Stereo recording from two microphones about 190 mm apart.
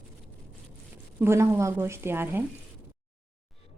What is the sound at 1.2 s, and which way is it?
A woman's voice, 15° right (ahead or behind).